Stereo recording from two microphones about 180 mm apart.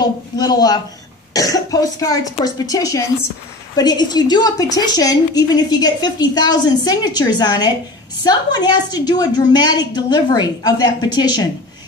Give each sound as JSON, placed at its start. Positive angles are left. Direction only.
{"t": 0.0, "sound": "a woman's voice", "side_deg": 20}